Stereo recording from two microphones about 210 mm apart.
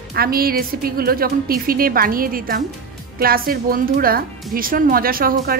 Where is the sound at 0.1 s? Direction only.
45° right (ahead or behind).